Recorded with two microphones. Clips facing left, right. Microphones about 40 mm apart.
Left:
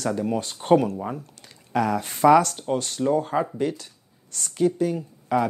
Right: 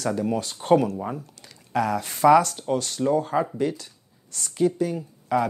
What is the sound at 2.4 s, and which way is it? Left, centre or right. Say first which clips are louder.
Speech: even; left.